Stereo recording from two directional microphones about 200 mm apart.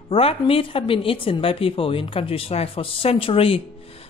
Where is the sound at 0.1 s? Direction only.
30° left (ahead or behind).